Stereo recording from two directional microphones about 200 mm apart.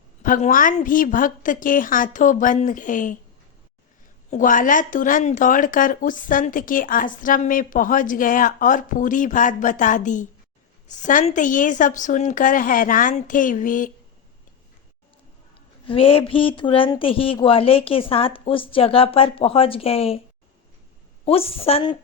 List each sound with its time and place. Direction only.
0.2 s speech: 40° left (ahead or behind)
4.3 s speech: 40° left (ahead or behind)
15.9 s speech: 25° left (ahead or behind)
21.2 s speech: 30° left (ahead or behind)